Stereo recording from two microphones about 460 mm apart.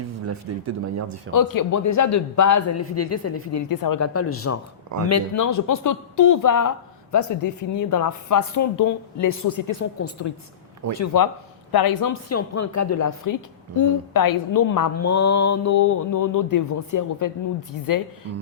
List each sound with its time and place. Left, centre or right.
0.3 s speech: right
1.3 s a woman's voice: left
11.7 s speech: left
12.3 s a woman's voice: left